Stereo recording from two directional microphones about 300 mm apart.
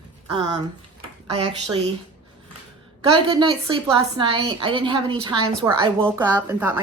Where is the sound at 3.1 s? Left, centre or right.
Centre.